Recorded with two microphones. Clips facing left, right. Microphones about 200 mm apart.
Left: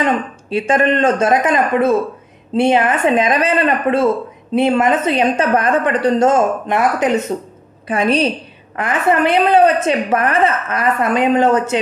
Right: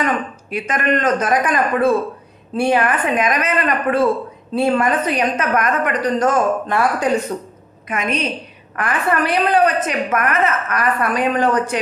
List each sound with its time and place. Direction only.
0.0 s a woman's voice: 30° left (ahead or behind)